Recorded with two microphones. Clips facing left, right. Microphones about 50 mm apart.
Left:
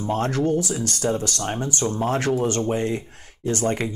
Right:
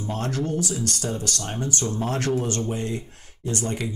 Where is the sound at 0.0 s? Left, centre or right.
Left.